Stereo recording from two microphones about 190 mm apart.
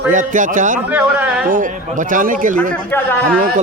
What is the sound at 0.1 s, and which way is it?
Speech, 45° right (ahead or behind).